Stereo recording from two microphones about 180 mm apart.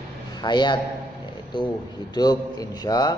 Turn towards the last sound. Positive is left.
turn(degrees=20)  # may be behind; listen again after turning